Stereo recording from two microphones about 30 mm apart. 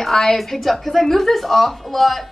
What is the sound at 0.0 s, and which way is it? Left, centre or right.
A woman's voice, centre.